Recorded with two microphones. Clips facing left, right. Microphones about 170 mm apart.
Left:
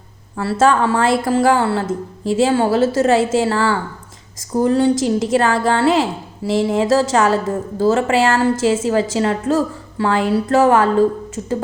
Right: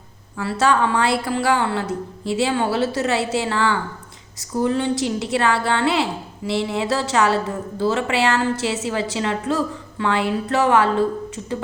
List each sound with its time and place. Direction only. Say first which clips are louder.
0.3 s a woman's voice: left 4 dB; 45° left (ahead or behind)